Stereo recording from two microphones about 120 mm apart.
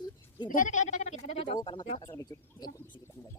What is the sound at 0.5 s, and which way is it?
Speech, 90° left.